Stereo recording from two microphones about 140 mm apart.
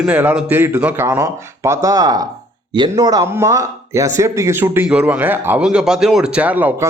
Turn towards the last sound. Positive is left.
turn(degrees=-10)  # may be behind; listen again after turning